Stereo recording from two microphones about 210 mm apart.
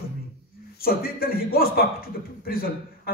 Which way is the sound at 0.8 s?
45° left (ahead or behind).